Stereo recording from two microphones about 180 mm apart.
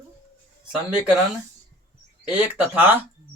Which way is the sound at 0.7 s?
5° right (ahead or behind).